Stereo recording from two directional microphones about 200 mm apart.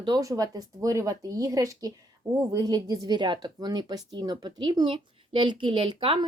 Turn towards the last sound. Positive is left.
turn(degrees=-25)  # may be behind; listen again after turning